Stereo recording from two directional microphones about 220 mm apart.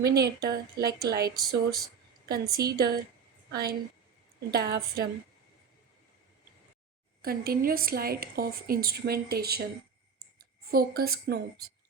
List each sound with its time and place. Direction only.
0.0 s a woman's voice: 45° right (ahead or behind)
7.2 s a woman's voice: 45° right (ahead or behind)